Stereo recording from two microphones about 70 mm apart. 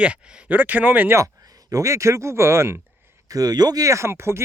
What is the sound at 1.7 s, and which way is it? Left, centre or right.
Speech, right.